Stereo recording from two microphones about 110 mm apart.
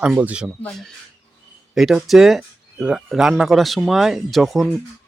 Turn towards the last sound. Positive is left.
turn(degrees=0)  # may be behind; listen again after turning